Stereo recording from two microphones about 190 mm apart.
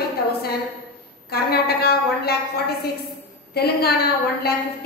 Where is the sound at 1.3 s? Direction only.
55° left (ahead or behind).